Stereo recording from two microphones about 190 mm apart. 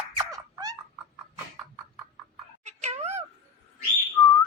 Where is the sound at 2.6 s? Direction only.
35° right (ahead or behind).